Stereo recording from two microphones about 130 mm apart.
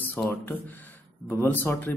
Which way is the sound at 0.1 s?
15° left (ahead or behind).